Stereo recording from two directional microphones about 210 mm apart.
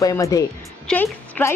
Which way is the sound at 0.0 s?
15° left (ahead or behind).